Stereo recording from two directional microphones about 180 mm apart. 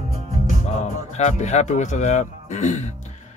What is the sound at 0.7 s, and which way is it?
Speech, 40° left (ahead or behind).